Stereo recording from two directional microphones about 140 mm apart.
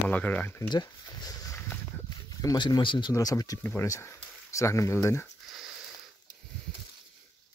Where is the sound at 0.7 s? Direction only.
30° left (ahead or behind).